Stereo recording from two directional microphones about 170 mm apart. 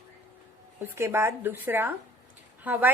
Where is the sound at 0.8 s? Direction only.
15° right (ahead or behind).